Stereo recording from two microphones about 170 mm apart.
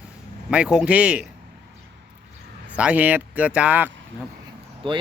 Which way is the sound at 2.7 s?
5° right (ahead or behind).